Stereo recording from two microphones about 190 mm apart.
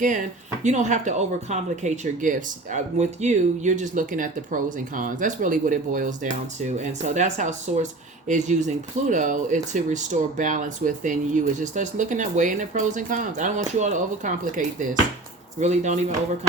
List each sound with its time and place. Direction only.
0.0 s speech: 40° right (ahead or behind)